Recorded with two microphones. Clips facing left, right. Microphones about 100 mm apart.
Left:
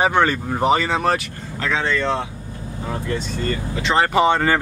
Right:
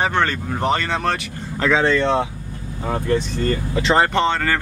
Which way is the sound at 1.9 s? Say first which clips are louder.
Right 4 dB; 20° right (ahead or behind).